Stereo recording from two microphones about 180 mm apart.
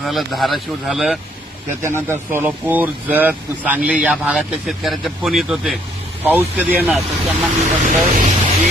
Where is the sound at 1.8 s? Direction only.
15° right (ahead or behind).